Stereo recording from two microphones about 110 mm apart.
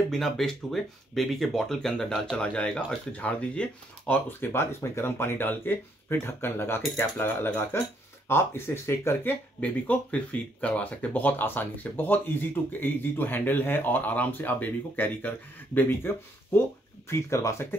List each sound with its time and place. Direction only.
0.1 s speech: 5° left (ahead or behind); by 17.7 s 25° left (ahead or behind)